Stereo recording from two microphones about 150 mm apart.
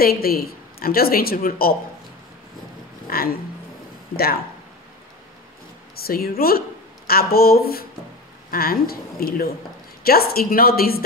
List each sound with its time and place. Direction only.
0.0 s a woman's voice: 85° left
3.1 s speech: 85° left
5.9 s a woman's voice: 90° left